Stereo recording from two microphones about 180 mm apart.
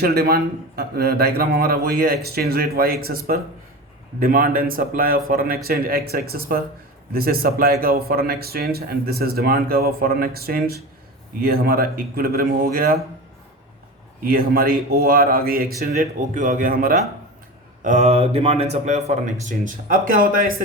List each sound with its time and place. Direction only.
0.0 s a man's voice: 60° right (ahead or behind)
14.3 s a man's voice: 55° right (ahead or behind)
17.8 s speech: 40° right (ahead or behind)